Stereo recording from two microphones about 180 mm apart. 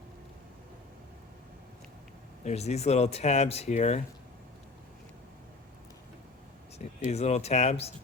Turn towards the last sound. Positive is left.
turn(degrees=35)  # may be behind; listen again after turning